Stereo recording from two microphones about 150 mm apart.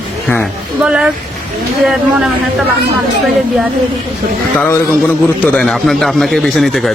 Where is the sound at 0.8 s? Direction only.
5° right (ahead or behind).